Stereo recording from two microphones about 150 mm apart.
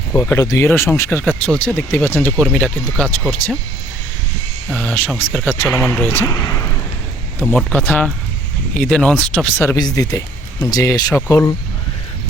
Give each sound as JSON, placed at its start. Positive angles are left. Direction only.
{"t": 0.1, "sound": "speech", "side_deg": 15}
{"t": 4.7, "sound": "speech", "side_deg": 10}
{"t": 9.6, "sound": "speech", "side_deg": 20}